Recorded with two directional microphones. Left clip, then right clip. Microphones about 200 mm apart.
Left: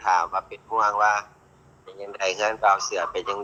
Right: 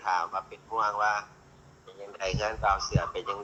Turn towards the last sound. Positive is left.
turn(degrees=30)  # may be behind; listen again after turning